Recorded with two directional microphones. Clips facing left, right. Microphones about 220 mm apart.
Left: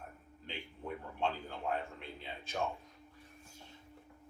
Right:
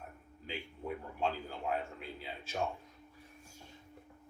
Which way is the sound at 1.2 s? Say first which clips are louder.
Even; 5° right (ahead or behind).